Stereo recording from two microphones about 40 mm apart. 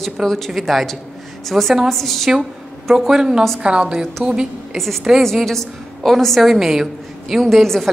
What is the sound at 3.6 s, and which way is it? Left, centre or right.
A woman's voice, right.